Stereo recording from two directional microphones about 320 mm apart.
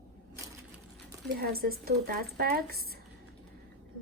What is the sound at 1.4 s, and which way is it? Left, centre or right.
A woman's voice, right.